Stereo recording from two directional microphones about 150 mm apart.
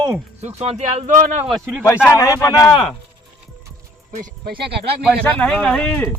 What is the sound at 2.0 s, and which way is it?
Speech, 20° left (ahead or behind).